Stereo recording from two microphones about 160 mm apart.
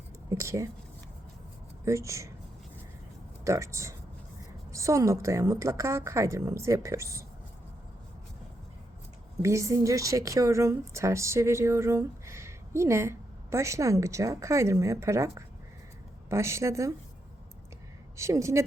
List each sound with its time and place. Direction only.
0.3 s speech: 20° right (ahead or behind)
1.8 s a woman's voice: 20° right (ahead or behind)
3.4 s a woman's voice: 20° right (ahead or behind)
9.4 s a woman's voice: 20° right (ahead or behind)
18.2 s a woman's voice: 20° right (ahead or behind)